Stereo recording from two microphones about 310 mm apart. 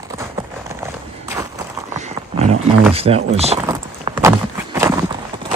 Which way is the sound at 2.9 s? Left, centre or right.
Centre.